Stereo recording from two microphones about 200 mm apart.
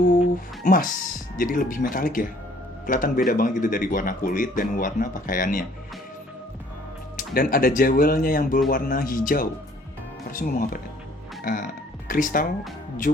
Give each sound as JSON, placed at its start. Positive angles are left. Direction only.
{"t": 0.6, "sound": "speech", "side_deg": 45}
{"t": 7.2, "sound": "speech", "side_deg": 45}